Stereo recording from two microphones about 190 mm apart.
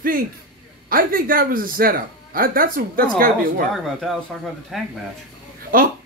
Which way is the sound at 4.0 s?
Centre (ahead or behind).